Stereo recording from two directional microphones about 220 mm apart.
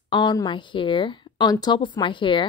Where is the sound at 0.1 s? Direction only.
20° left (ahead or behind).